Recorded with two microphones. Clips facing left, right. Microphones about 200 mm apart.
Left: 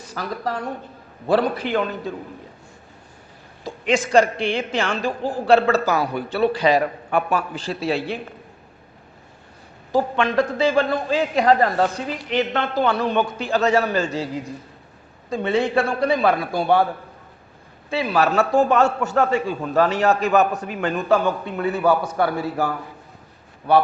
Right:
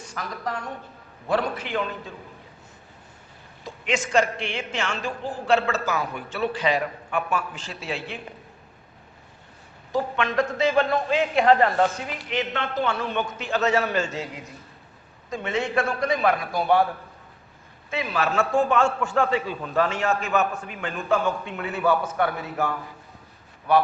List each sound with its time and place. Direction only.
0.1 s speech: 35° left (ahead or behind)
3.6 s speech: 35° left (ahead or behind)
9.9 s speech: 30° left (ahead or behind)
15.3 s speech: 30° left (ahead or behind)
17.9 s speech: 35° left (ahead or behind)